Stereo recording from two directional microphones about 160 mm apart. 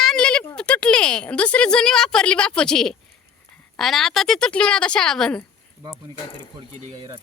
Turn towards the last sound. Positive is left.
turn(degrees=5)  # may be behind; listen again after turning